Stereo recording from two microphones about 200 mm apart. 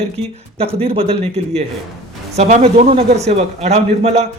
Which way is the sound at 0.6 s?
30° right (ahead or behind).